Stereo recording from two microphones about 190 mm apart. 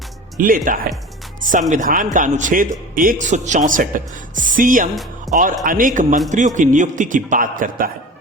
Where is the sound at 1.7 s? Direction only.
45° right (ahead or behind).